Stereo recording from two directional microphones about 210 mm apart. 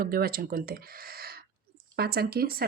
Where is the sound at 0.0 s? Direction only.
45° right (ahead or behind).